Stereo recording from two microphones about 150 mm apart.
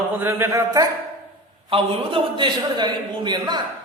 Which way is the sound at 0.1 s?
15° right (ahead or behind).